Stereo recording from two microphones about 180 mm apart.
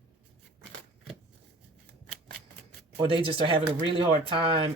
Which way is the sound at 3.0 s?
30° right (ahead or behind).